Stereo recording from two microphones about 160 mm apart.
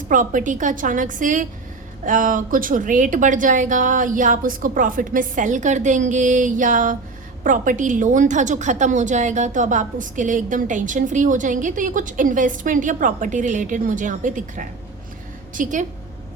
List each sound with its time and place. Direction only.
0.1 s a woman's voice: 55° right (ahead or behind)